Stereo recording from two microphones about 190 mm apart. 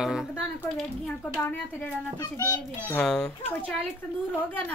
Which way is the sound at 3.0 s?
5° left (ahead or behind).